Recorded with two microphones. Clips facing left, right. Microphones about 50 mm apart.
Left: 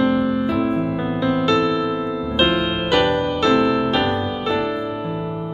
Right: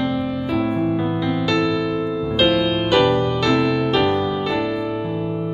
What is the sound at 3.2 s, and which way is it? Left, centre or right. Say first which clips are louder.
Music: left 1 dB; centre.